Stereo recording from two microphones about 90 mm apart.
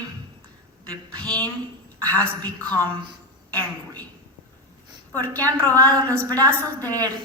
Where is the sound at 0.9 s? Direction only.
10° left (ahead or behind).